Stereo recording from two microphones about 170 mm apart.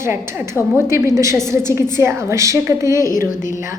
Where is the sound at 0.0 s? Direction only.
15° right (ahead or behind).